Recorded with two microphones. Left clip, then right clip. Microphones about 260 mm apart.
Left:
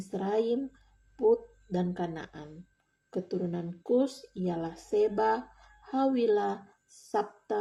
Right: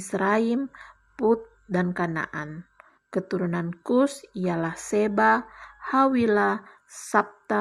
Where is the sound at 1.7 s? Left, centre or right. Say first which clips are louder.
Right 7 dB; right.